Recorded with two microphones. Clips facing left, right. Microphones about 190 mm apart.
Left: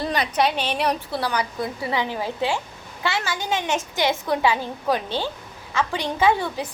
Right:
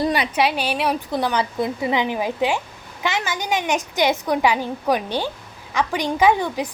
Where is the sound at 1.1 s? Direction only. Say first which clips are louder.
Right 4 dB; 20° right (ahead or behind).